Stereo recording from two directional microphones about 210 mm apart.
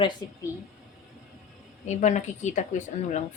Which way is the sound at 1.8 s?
35° left (ahead or behind).